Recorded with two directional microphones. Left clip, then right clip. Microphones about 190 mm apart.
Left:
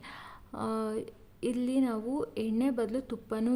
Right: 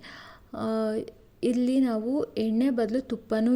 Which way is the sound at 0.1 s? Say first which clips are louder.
Right 4 dB; 10° right (ahead or behind).